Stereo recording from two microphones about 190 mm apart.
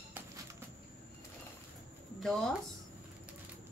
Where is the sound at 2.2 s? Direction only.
Centre (ahead or behind).